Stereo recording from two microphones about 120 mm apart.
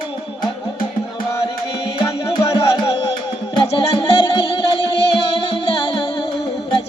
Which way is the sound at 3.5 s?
40° left (ahead or behind).